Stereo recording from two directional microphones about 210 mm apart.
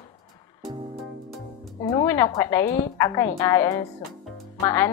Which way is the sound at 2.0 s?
10° left (ahead or behind).